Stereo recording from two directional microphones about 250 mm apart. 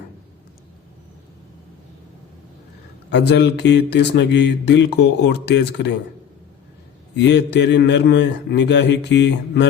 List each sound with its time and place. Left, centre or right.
3.1 s mantra: left
7.2 s mantra: left